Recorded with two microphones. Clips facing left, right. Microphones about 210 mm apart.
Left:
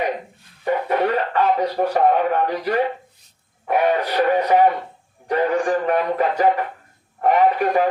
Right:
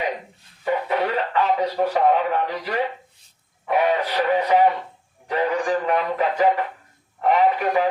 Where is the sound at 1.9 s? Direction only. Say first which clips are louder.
Left 3 dB; 45° left (ahead or behind).